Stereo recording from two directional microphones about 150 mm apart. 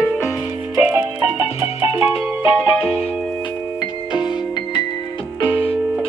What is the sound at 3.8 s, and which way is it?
Music, 30° left (ahead or behind).